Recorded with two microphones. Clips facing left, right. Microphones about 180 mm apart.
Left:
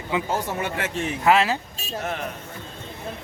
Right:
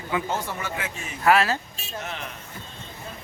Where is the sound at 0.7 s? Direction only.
80° left.